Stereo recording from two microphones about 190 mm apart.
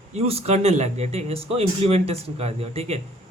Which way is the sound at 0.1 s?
30° right (ahead or behind).